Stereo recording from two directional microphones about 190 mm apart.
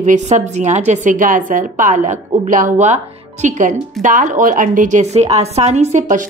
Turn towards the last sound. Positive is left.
turn(degrees=-35)  # may be behind; listen again after turning